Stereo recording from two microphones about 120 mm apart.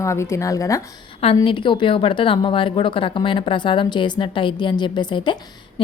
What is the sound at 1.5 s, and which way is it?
A woman's voice, 45° left (ahead or behind).